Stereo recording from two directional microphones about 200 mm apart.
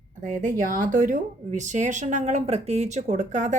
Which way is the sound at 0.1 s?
40° right (ahead or behind).